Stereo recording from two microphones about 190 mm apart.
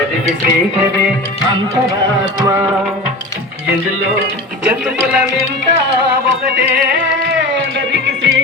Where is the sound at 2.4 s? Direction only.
15° right (ahead or behind).